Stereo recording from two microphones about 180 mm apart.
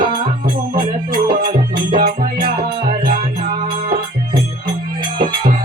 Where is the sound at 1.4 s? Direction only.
25° right (ahead or behind).